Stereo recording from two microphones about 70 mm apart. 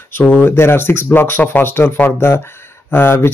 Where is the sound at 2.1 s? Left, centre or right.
Left.